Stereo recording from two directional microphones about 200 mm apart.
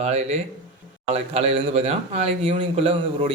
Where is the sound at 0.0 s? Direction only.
35° right (ahead or behind).